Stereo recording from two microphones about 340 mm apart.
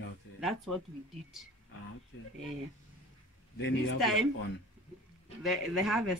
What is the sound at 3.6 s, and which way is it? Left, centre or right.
Speech, left.